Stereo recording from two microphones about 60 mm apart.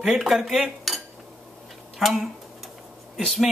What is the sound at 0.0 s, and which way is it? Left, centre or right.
Cutlery, centre.